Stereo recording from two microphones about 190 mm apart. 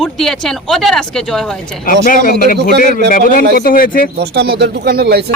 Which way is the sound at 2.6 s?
60° right (ahead or behind).